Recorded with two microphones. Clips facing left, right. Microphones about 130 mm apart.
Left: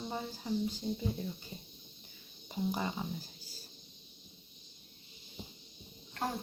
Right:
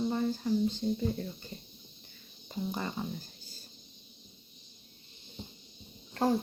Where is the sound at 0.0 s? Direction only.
10° left (ahead or behind).